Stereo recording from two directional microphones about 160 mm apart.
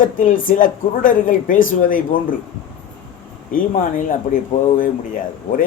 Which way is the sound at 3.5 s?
60° left (ahead or behind).